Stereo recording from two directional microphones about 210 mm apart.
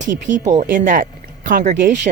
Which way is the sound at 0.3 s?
35° right (ahead or behind).